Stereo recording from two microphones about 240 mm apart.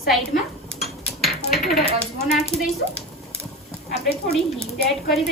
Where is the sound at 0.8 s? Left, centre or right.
Centre.